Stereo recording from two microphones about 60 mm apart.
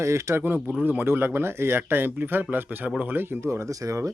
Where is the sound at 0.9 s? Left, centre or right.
Right.